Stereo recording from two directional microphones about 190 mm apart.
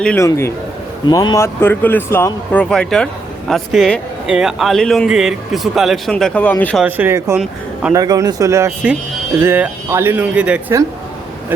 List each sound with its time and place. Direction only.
0.0 s speech: 5° left (ahead or behind)
6.8 s speech: 10° right (ahead or behind)
7.9 s speech: 20° right (ahead or behind)